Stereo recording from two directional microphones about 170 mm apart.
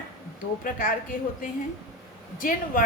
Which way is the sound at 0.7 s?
55° left (ahead or behind).